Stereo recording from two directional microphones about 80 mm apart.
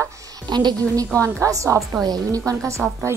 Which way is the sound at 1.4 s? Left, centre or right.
Right.